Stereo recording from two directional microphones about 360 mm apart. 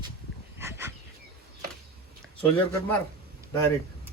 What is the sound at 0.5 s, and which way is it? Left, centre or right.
Dog, centre.